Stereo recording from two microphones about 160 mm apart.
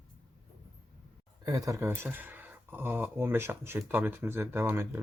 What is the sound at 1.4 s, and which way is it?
Speech, 20° right (ahead or behind).